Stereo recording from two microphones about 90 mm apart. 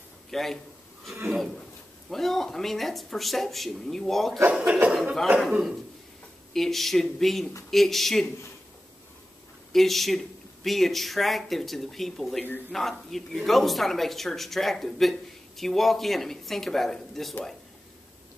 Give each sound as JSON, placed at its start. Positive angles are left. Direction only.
{"t": 0.3, "sound": "a man's voice", "side_deg": 5}
{"t": 4.5, "sound": "speech", "side_deg": -10}
{"t": 9.7, "sound": "speech", "side_deg": 0}